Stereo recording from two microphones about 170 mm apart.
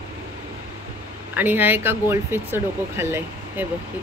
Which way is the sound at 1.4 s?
10° right (ahead or behind).